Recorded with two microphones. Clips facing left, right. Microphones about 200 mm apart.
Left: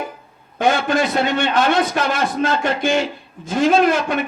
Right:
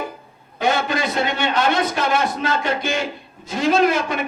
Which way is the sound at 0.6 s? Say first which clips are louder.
Left 3 dB; 50° left (ahead or behind).